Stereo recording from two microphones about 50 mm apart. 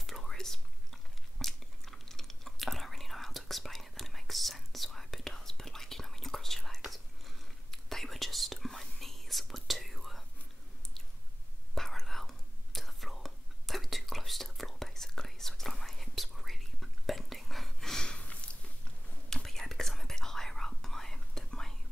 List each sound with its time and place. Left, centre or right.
0.0 s whispering: centre
1.4 s chewing: centre
6.8 s whispering: centre
11.7 s whispering: centre
18.2 s a sound: left
19.2 s whispering: centre